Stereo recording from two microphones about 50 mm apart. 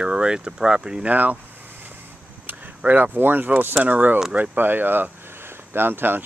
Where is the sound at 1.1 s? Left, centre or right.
Right.